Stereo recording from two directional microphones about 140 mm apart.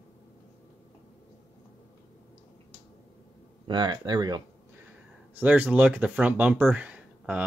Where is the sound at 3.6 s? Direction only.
30° right (ahead or behind).